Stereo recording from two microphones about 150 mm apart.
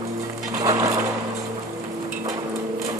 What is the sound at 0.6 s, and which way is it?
Sewing machine, 25° right (ahead or behind).